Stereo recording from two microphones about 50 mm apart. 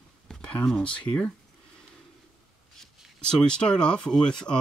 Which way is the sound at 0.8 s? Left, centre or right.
Left.